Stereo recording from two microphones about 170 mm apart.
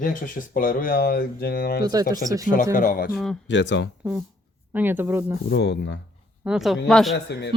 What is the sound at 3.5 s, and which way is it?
Speech, 90° left.